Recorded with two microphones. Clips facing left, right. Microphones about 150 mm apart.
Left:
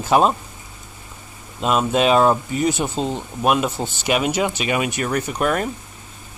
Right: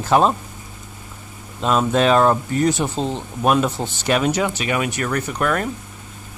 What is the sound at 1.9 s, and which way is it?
Speech, 10° left (ahead or behind).